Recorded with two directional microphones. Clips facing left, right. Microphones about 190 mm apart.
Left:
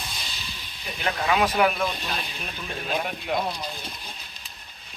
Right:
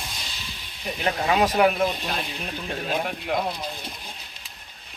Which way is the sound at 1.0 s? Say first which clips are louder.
Right 2 dB; 25° right (ahead or behind).